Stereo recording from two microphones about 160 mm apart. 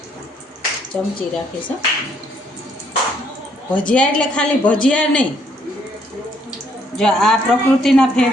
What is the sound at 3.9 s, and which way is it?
A man's voice, 5° left (ahead or behind).